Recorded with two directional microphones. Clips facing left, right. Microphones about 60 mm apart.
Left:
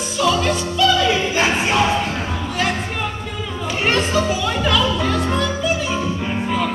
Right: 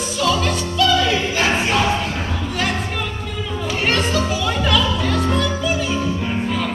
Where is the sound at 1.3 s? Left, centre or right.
Left.